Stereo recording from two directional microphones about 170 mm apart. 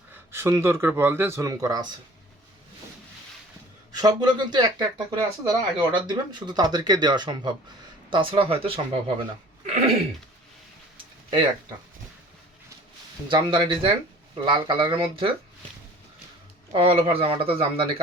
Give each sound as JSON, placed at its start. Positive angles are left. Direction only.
{"t": 0.1, "sound": "speech", "side_deg": -15}
{"t": 3.9, "sound": "speech", "side_deg": -25}
{"t": 10.9, "sound": "a sound", "side_deg": -25}
{"t": 13.2, "sound": "speech", "side_deg": -30}
{"t": 16.7, "sound": "speech", "side_deg": -35}